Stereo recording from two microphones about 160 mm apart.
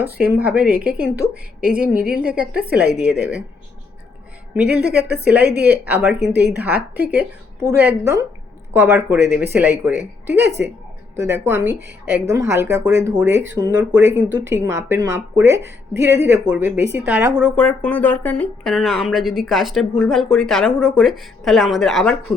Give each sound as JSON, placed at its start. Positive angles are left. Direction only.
{"t": 0.0, "sound": "a woman's voice", "side_deg": -10}
{"t": 4.5, "sound": "a woman's voice", "side_deg": -5}
{"t": 4.9, "sound": "a woman's voice", "side_deg": -80}
{"t": 5.5, "sound": "a woman's voice", "side_deg": -10}
{"t": 6.3, "sound": "a woman's voice", "side_deg": -90}
{"t": 6.6, "sound": "a woman's voice", "side_deg": -10}
{"t": 17.5, "sound": "speech", "side_deg": 10}
{"t": 18.7, "sound": "speech", "side_deg": 0}